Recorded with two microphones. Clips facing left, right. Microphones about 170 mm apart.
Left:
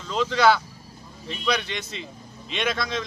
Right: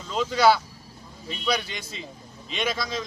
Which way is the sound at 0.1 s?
5° right (ahead or behind).